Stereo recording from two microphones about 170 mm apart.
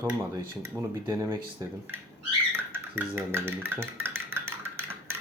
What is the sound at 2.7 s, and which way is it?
Stir, 15° right (ahead or behind).